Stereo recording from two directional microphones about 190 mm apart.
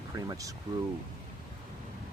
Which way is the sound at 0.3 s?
15° right (ahead or behind).